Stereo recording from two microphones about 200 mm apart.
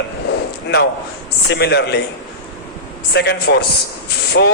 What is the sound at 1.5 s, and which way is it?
Speech, 55° left (ahead or behind).